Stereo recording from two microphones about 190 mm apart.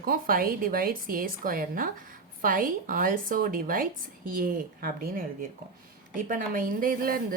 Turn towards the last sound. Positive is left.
turn(degrees=-50)  # may be behind; listen again after turning